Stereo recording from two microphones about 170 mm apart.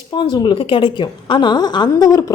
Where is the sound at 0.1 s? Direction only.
25° left (ahead or behind).